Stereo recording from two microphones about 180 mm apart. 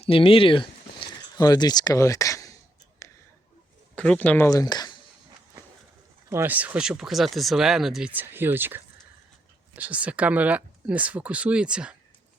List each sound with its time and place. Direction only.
0.0 s a sound: 30° left (ahead or behind)
3.9 s speech: 5° left (ahead or behind)
4.4 s speech: 20° left (ahead or behind)
6.3 s speech: 10° right (ahead or behind)